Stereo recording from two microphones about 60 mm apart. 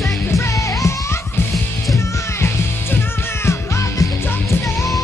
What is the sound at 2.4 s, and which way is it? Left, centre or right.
Music, left.